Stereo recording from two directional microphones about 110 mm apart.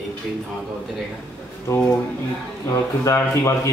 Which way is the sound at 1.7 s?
25° left (ahead or behind).